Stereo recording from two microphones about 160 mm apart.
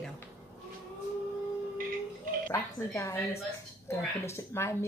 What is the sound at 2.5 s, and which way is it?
Speech, 20° left (ahead or behind).